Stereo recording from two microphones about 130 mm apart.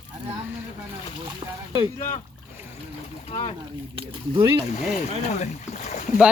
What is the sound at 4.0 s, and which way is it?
Speech, 40° right (ahead or behind).